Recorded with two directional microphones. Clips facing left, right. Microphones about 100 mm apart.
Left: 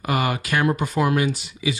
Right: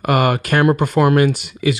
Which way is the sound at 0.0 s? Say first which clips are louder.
Right 7 dB; 60° right (ahead or behind).